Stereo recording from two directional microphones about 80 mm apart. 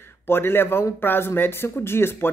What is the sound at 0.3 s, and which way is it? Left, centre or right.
A man's voice, left.